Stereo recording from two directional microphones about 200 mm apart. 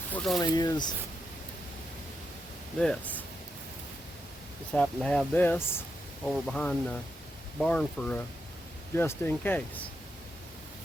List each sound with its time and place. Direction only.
0.1 s a sound: 5° left (ahead or behind)
0.3 s speech: 20° left (ahead or behind)
2.7 s speech: 5° left (ahead or behind)
4.7 s speech: 5° left (ahead or behind)